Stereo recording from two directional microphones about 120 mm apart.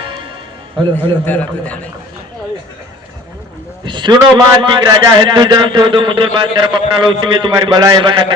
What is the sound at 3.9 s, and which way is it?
A man's voice, 40° right (ahead or behind).